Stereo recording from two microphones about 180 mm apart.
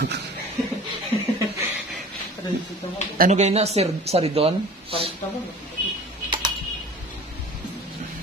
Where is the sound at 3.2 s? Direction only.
40° right (ahead or behind).